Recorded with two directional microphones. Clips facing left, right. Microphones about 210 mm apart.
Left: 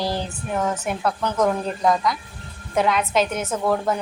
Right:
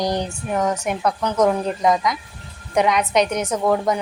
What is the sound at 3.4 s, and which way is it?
Speech, 15° right (ahead or behind).